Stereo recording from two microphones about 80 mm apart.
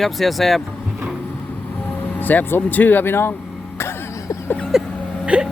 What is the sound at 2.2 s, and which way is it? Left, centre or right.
Speech, left.